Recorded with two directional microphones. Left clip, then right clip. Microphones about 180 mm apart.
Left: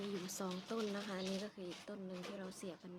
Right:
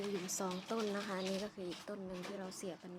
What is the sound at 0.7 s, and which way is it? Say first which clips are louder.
Speech: right 3 dB; 10° right (ahead or behind).